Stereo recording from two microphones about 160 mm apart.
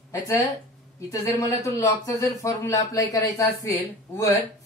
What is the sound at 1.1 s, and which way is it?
Speech, 20° left (ahead or behind).